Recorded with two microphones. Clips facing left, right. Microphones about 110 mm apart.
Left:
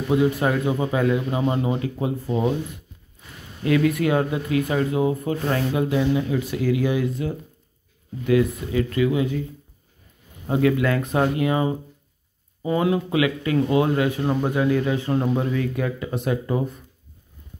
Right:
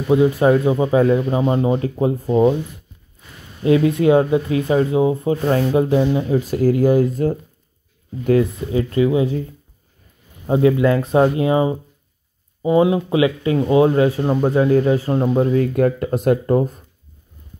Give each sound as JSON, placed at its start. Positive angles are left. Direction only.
{"t": 0.4, "sound": "speech", "side_deg": -25}
{"t": 3.6, "sound": "speech", "side_deg": -25}
{"t": 8.7, "sound": "speech", "side_deg": -30}
{"t": 10.4, "sound": "speech", "side_deg": -25}
{"t": 15.7, "sound": "speech", "side_deg": -50}